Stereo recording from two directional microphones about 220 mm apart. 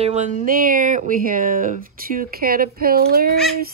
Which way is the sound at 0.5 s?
40° right (ahead or behind).